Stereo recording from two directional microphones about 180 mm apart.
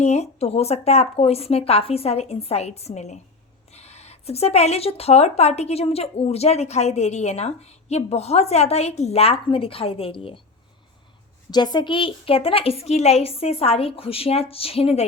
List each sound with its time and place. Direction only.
0.0 s speech: 40° left (ahead or behind)
11.5 s speech: 25° left (ahead or behind)